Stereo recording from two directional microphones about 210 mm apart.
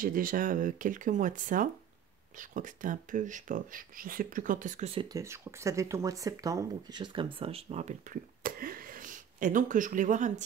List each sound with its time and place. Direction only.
0.0 s speech: 40° right (ahead or behind)
5.0 s speech: 15° right (ahead or behind); by 10.3 s 35° right (ahead or behind)